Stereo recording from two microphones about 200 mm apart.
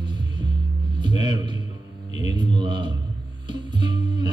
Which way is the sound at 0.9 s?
20° right (ahead or behind).